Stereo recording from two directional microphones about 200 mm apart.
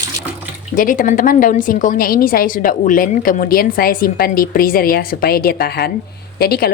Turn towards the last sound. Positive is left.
turn(degrees=50)  # may be behind; listen again after turning